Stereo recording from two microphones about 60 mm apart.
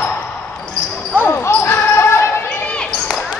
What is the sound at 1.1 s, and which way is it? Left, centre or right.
Speech, left.